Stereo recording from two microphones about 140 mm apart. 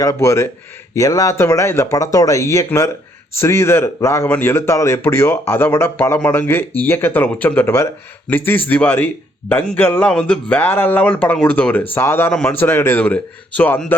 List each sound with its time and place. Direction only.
0.0 s speech: 20° left (ahead or behind)